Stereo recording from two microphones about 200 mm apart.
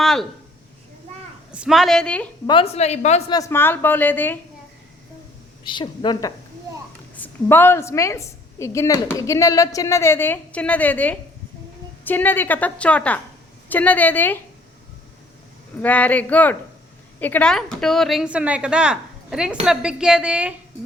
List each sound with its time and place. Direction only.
0.0 s a sound: centre (ahead or behind)
1.5 s speech: centre (ahead or behind)
2.5 s a woman's voice: 30° left (ahead or behind)
3.3 s a woman's voice: 15° left (ahead or behind)
5.6 s a woman's voice: 25° left (ahead or behind)
15.8 s a woman's voice: 5° left (ahead or behind)